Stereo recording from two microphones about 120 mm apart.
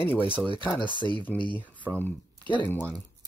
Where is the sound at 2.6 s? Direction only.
15° left (ahead or behind).